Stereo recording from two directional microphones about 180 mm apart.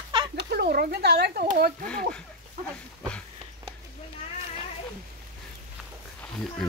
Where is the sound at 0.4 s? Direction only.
65° right (ahead or behind).